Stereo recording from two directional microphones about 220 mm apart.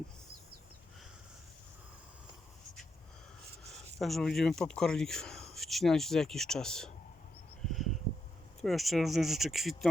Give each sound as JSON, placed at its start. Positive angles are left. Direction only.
{"t": 3.9, "sound": "speech", "side_deg": 0}
{"t": 7.7, "sound": "a sound", "side_deg": 0}
{"t": 8.6, "sound": "speech", "side_deg": 0}